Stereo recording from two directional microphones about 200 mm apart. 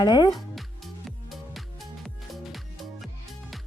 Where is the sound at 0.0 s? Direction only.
20° left (ahead or behind).